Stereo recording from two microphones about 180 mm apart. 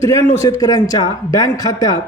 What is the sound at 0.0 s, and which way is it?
Speech, 15° left (ahead or behind).